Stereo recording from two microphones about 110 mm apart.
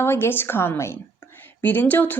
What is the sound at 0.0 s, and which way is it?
Speech, 20° left (ahead or behind).